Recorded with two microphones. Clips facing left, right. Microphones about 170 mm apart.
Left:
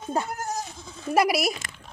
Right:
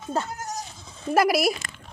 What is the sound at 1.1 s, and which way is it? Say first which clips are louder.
Speech: right 2 dB; centre (ahead or behind).